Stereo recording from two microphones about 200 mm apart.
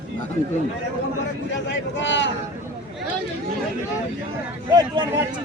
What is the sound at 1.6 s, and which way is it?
Speech, 65° left (ahead or behind).